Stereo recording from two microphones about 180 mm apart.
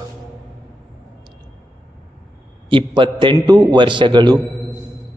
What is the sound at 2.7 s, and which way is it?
A man's voice, 25° right (ahead or behind).